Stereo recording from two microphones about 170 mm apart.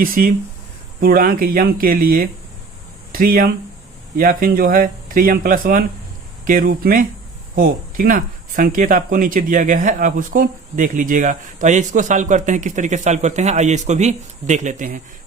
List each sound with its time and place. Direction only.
0.0 s speech: 55° right (ahead or behind)